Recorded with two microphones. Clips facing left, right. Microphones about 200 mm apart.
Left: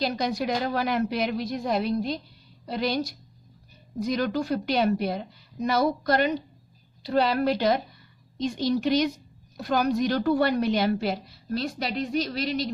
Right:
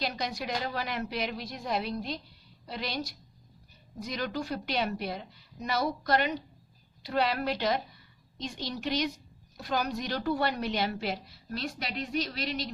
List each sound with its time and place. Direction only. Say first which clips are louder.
0.0 s a woman's voice: left 7 dB; 40° left (ahead or behind)
4.0 s a woman's voice: left 8 dB; 45° left (ahead or behind)